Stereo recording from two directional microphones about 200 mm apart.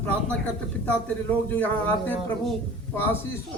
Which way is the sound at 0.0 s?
5° left (ahead or behind).